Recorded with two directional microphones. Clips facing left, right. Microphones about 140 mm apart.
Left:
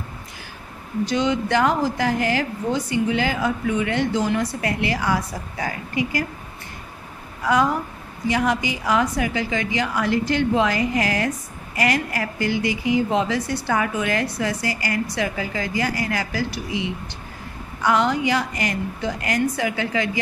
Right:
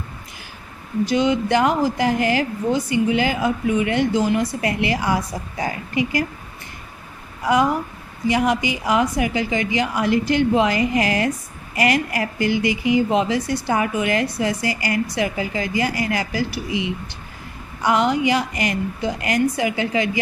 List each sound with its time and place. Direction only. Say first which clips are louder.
1.0 s a woman's voice: right 3 dB; 10° right (ahead or behind)
8.3 s a woman's voice: right 2 dB; 15° right (ahead or behind)